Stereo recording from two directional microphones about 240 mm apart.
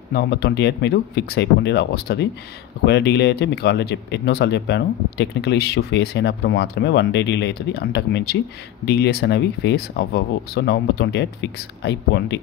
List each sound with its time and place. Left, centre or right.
0.1 s speech: left